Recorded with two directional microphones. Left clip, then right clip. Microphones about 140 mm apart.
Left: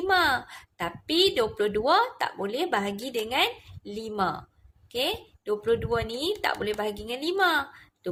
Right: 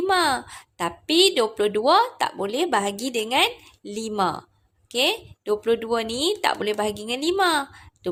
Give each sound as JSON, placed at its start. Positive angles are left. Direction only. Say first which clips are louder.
{"t": 0.1, "sound": "a woman's voice", "louder": "even", "side_deg": -40}